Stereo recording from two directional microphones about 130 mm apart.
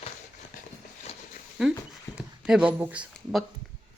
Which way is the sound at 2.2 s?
5° right (ahead or behind).